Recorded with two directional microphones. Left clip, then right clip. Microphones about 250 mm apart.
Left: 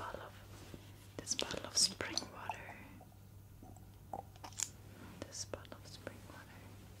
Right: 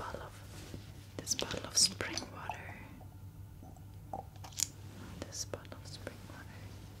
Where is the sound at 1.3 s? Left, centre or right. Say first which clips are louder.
Right 3 dB; centre.